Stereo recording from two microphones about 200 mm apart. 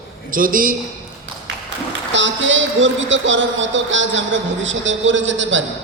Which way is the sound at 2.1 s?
70° right (ahead or behind).